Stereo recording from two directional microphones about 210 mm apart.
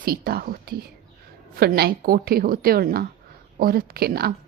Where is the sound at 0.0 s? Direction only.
45° right (ahead or behind).